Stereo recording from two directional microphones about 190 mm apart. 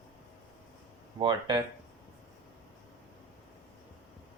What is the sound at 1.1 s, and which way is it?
Speech, 25° right (ahead or behind).